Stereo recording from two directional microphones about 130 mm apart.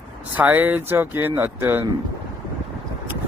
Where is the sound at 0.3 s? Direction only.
15° right (ahead or behind).